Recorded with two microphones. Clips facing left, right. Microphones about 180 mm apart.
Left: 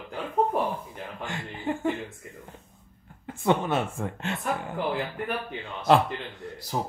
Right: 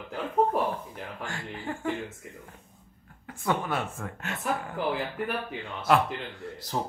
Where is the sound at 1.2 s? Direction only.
20° left (ahead or behind).